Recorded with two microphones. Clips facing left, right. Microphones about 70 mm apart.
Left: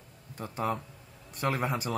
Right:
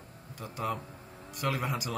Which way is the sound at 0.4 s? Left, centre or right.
Left.